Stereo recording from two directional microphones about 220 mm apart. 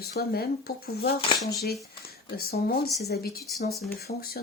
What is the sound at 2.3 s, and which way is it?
Speech, 45° left (ahead or behind).